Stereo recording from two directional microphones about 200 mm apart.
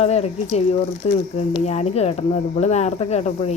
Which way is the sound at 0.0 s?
30° left (ahead or behind).